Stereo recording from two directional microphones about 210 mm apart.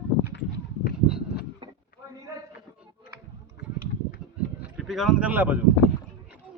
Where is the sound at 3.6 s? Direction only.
50° left (ahead or behind).